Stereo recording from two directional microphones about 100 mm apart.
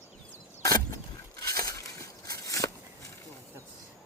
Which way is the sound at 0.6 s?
35° left (ahead or behind).